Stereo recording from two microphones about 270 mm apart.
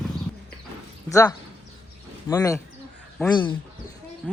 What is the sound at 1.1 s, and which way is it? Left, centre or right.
Speech, centre.